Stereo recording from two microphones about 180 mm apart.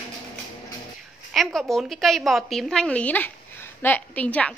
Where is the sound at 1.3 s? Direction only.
Centre (ahead or behind).